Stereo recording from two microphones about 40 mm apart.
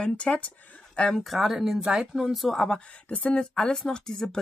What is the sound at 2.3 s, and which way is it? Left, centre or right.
Speech, centre.